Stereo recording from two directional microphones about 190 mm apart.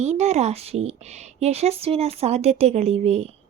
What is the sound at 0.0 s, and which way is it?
A woman's voice, 35° right (ahead or behind).